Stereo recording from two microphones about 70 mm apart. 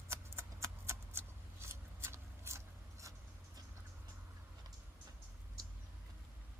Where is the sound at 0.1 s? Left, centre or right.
Right.